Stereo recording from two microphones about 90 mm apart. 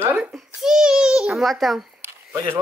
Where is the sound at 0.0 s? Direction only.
25° right (ahead or behind).